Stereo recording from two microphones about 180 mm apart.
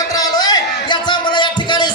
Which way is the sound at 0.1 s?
20° left (ahead or behind).